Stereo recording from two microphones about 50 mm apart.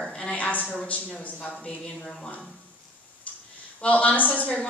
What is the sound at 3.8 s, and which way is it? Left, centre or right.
Speech, left.